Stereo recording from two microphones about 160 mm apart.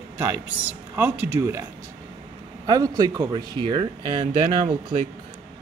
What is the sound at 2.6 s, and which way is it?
Speech, 25° right (ahead or behind).